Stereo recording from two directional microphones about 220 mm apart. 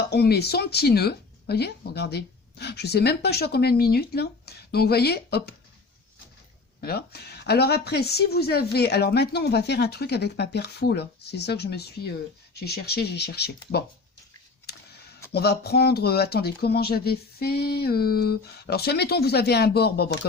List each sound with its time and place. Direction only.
0.1 s speech: 45° left (ahead or behind)
6.8 s speech: 45° left (ahead or behind)
15.3 s speech: 45° left (ahead or behind)